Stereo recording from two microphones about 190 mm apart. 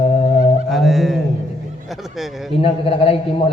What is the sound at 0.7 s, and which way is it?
Speech, centre (ahead or behind).